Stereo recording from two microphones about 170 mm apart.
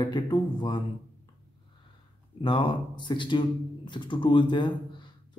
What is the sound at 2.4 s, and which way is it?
Speech, 30° left (ahead or behind).